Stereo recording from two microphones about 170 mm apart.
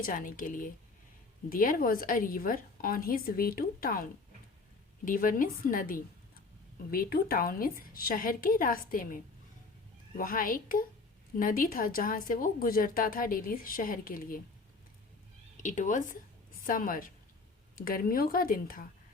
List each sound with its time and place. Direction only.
0.0 s a woman's voice: 55° left (ahead or behind)
5.0 s a woman's voice: 55° left (ahead or behind)
15.5 s a woman's voice: 45° left (ahead or behind)